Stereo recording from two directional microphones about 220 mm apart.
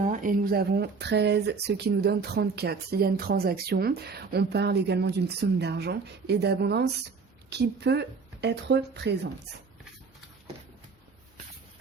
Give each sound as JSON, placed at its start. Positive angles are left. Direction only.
{"t": 0.0, "sound": "speech", "side_deg": -35}